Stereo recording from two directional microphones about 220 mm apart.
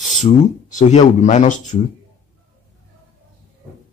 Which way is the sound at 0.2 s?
35° left (ahead or behind).